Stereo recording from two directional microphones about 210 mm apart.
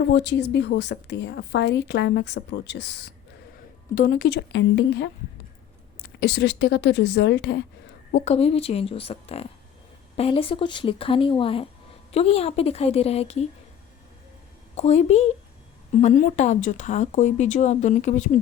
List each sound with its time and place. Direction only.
0.1 s a woman's voice: 55° left (ahead or behind)
3.9 s a woman's voice: 40° left (ahead or behind)
8.1 s speech: 30° left (ahead or behind)
14.8 s speech: 30° left (ahead or behind)